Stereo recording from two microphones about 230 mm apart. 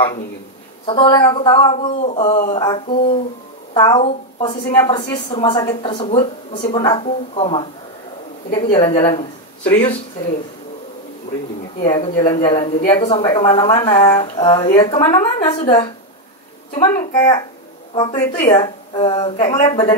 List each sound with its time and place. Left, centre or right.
0.8 s speech: left
8.5 s speech: left
8.7 s speech: left
11.8 s speech: left